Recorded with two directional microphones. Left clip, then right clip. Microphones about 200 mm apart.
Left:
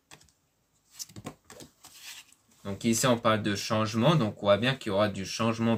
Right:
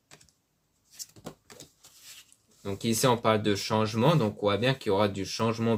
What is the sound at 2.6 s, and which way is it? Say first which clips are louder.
Speech: right 1 dB; 40° right (ahead or behind).